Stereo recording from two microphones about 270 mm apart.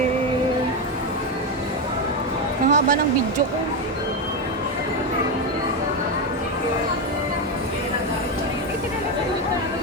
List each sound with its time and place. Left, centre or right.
2.6 s speech: right